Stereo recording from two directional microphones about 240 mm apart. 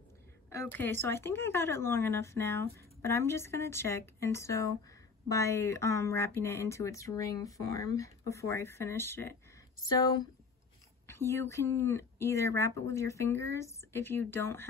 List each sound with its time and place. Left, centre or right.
0.5 s speech: centre